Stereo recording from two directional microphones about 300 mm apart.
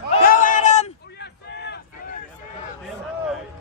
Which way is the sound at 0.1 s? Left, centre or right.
Left.